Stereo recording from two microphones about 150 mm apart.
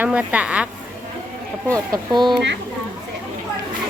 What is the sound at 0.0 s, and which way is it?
Speech, 10° right (ahead or behind).